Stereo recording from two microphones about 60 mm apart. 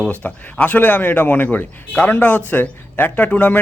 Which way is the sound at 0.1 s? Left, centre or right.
Left.